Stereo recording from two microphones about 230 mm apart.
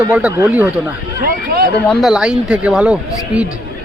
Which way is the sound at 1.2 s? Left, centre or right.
Right.